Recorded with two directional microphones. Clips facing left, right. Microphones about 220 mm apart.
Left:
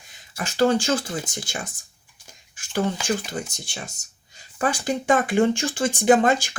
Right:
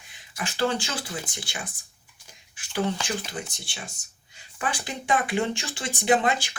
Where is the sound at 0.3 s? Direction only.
40° left (ahead or behind).